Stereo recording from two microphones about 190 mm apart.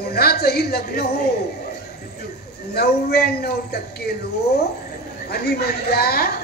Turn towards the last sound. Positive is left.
turn(degrees=55)  # may be behind; listen again after turning